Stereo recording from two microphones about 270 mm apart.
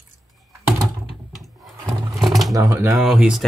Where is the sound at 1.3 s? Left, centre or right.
Centre.